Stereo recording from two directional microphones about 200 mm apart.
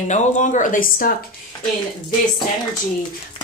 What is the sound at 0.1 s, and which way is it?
A woman's voice, 40° left (ahead or behind).